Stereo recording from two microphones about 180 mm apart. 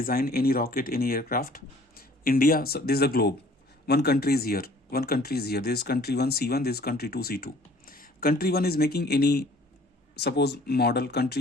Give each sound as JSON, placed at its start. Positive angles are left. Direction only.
{"t": 0.0, "sound": "speech", "side_deg": 55}